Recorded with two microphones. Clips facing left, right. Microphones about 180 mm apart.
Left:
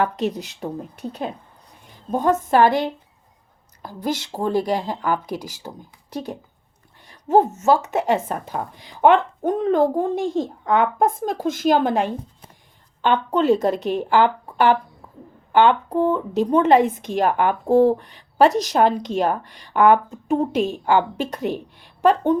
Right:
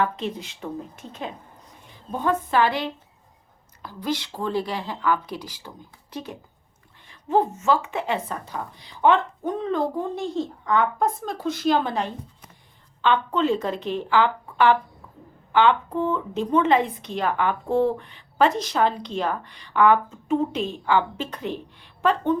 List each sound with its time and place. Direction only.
0.0 s speech: 40° left (ahead or behind)
5.2 s speech: 10° left (ahead or behind)
5.6 s speech: 40° left (ahead or behind)